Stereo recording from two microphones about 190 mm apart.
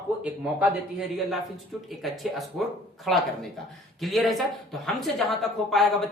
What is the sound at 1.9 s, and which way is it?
Speech, centre (ahead or behind).